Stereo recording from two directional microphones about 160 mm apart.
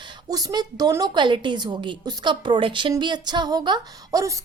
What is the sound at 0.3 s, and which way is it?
A woman's voice, 25° right (ahead or behind).